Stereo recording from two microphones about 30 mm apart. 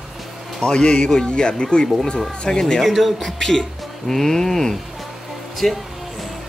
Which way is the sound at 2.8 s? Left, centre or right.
Centre.